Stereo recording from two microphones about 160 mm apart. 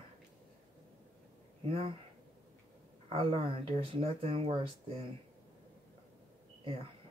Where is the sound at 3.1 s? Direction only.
35° right (ahead or behind).